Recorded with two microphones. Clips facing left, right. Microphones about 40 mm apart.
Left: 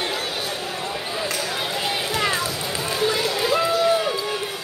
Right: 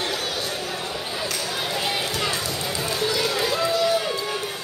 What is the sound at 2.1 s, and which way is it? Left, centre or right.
Run, left.